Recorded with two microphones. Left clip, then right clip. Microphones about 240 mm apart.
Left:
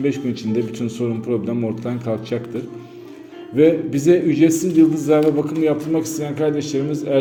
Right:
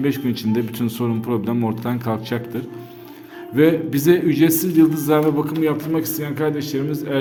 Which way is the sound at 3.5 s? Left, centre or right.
Right.